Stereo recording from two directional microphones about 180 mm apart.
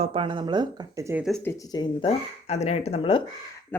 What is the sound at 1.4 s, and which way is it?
Speech, 15° left (ahead or behind).